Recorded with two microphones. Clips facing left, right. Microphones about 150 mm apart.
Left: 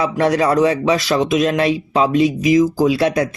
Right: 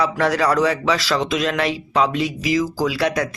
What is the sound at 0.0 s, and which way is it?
Speech, 20° left (ahead or behind).